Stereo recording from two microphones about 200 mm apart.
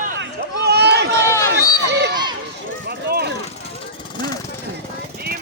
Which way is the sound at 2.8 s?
55° right (ahead or behind).